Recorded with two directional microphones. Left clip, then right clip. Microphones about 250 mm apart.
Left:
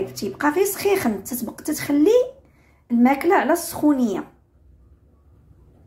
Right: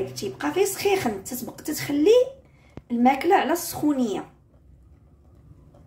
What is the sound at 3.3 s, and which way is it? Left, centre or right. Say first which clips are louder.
Speech: left 2 dB; centre.